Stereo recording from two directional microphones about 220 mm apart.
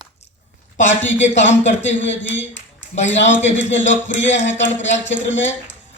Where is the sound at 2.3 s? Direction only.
55° left (ahead or behind).